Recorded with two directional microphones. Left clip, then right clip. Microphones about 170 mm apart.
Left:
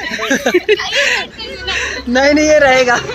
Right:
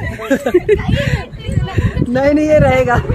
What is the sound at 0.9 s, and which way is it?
Speech, 15° left (ahead or behind).